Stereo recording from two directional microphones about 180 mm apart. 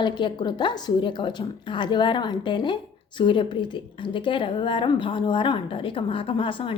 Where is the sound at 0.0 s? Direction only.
25° left (ahead or behind).